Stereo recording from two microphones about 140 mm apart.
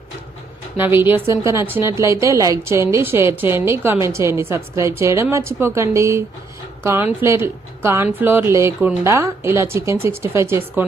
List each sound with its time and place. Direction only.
0.8 s a woman's voice: 15° right (ahead or behind)